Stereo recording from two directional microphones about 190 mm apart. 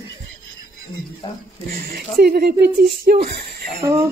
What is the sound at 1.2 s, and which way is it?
Speech, 20° left (ahead or behind).